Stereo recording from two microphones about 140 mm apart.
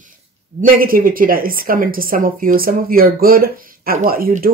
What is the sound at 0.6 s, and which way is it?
Speech, 85° right.